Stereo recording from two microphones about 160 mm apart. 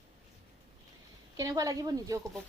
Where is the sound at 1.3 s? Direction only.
20° right (ahead or behind).